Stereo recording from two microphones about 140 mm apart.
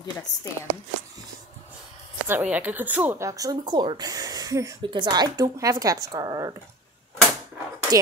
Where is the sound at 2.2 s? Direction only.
10° right (ahead or behind).